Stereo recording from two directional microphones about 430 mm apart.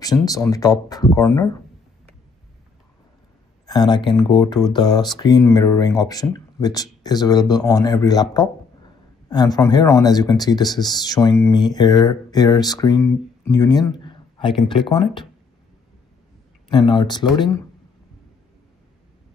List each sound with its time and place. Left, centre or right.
0.0 s speech: centre
3.6 s speech: centre
16.6 s speech: centre